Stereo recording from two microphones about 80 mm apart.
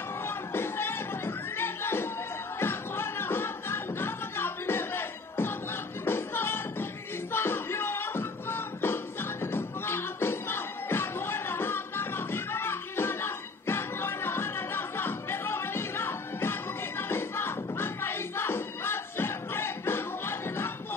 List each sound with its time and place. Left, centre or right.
0.2 s music: left